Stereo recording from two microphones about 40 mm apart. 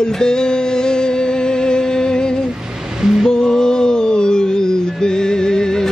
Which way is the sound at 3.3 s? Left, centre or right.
Centre.